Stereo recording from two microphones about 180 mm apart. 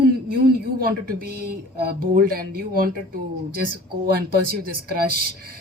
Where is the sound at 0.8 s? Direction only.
55° right (ahead or behind).